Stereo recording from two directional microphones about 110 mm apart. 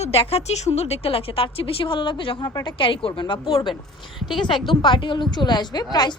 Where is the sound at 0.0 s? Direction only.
65° left (ahead or behind).